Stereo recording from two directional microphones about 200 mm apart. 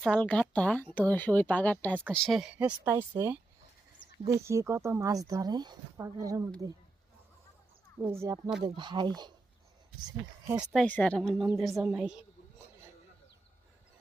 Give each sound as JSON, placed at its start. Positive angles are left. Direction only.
{"t": 0.0, "sound": "speech", "side_deg": 5}
{"t": 8.0, "sound": "speech", "side_deg": -15}
{"t": 10.7, "sound": "a woman's voice", "side_deg": 5}